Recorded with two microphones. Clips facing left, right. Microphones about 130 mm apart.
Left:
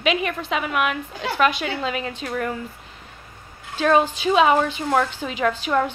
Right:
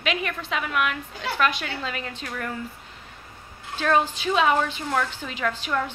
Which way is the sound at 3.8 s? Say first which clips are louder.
Left 4 dB; 15° left (ahead or behind).